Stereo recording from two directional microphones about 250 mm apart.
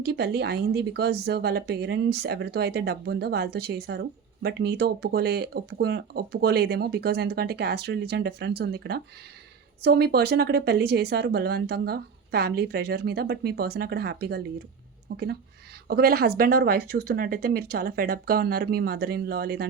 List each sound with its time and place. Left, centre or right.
0.0 s speech: right